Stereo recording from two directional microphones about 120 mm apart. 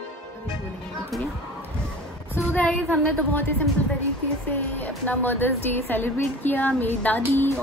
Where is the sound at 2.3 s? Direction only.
15° left (ahead or behind).